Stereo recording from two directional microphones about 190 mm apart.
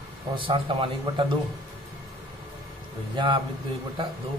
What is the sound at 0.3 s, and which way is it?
A man's voice, 25° right (ahead or behind).